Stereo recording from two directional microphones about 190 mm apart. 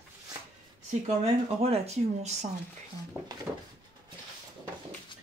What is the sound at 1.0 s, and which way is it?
Speech, 35° right (ahead or behind).